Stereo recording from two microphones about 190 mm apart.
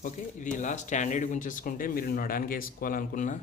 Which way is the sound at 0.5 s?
40° left (ahead or behind).